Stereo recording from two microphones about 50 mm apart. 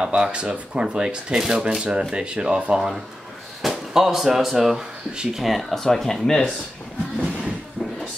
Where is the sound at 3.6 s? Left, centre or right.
Centre.